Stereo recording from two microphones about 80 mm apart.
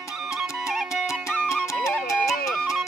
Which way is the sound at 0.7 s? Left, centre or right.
Centre.